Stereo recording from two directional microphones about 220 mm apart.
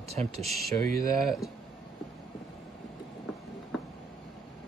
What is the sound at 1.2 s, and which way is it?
Speech, centre (ahead or behind).